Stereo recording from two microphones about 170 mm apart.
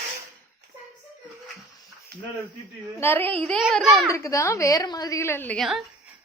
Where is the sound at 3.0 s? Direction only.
10° left (ahead or behind).